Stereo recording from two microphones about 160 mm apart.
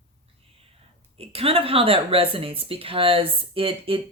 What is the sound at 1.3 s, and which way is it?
Speech, 35° right (ahead or behind).